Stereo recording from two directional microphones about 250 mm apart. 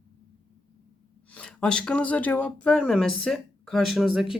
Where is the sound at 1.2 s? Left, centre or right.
Centre.